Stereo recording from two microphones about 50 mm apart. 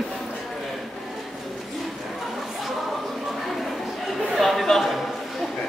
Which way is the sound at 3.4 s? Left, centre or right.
Centre.